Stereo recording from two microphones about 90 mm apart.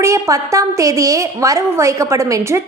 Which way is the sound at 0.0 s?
35° right (ahead or behind).